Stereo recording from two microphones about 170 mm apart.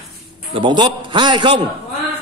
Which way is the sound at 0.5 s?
30° right (ahead or behind).